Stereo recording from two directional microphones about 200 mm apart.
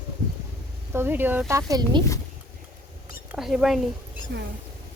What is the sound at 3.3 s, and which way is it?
Speech, centre (ahead or behind).